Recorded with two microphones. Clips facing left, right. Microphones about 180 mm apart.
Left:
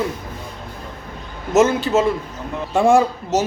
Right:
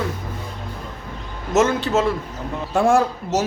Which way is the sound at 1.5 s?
Centre (ahead or behind).